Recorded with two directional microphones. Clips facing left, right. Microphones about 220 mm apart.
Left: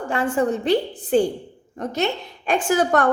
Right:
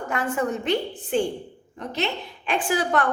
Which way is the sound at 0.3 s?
30° left (ahead or behind).